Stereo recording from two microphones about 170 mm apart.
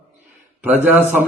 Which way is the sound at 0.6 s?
10° right (ahead or behind).